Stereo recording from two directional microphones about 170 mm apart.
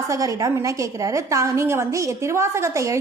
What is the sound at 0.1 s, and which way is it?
A woman's voice, 20° right (ahead or behind).